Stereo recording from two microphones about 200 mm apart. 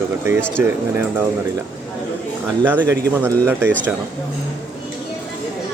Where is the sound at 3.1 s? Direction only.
10° right (ahead or behind).